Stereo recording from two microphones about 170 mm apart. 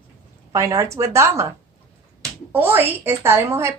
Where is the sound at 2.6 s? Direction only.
15° right (ahead or behind).